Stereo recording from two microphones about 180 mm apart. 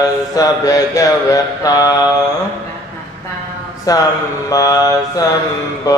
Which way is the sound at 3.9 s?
20° left (ahead or behind).